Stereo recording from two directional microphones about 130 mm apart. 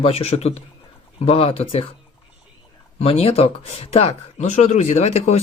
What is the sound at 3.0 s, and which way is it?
Speech, 50° left (ahead or behind).